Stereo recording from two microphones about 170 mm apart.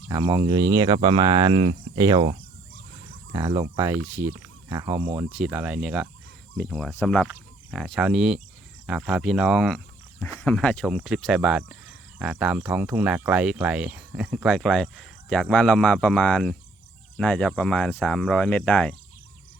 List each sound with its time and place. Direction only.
0.1 s speech: 20° right (ahead or behind)
3.3 s speech: 20° right (ahead or behind); by 6.1 s 5° right (ahead or behind)
6.6 s speech: 5° left (ahead or behind)